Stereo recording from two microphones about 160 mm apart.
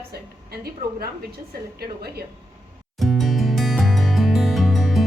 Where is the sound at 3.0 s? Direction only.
Centre (ahead or behind).